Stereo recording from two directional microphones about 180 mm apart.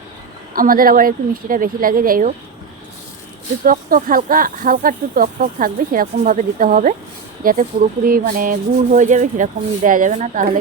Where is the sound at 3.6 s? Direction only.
50° right (ahead or behind).